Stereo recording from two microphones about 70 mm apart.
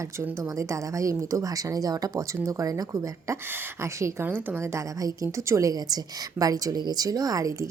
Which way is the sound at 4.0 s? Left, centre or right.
Right.